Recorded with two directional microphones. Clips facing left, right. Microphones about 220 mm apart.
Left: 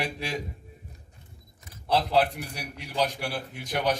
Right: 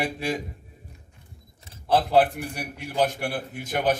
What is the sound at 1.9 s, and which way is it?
A man's voice, 50° right (ahead or behind).